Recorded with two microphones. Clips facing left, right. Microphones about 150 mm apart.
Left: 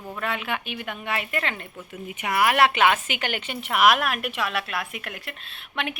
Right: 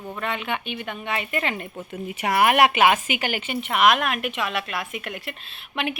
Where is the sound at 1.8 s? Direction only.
35° right (ahead or behind).